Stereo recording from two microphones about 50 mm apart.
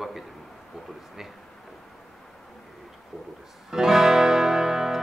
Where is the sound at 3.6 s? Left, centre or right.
Centre.